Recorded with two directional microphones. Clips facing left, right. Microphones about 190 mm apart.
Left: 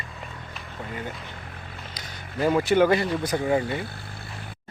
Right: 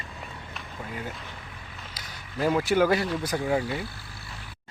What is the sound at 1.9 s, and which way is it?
Speech, centre (ahead or behind).